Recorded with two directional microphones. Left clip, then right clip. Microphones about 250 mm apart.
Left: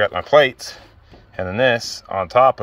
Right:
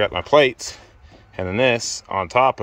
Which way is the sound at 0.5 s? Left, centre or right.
Right.